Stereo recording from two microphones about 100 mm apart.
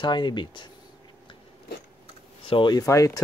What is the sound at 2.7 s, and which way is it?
Speech, 30° left (ahead or behind).